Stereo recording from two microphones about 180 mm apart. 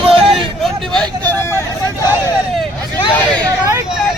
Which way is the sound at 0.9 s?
5° left (ahead or behind).